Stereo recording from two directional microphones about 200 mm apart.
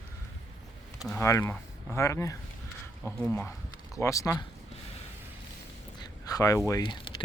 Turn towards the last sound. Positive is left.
turn(degrees=25)  # may be behind; listen again after turning